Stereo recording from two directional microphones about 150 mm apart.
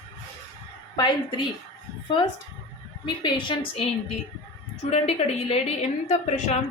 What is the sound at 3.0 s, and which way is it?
Speech, 30° left (ahead or behind).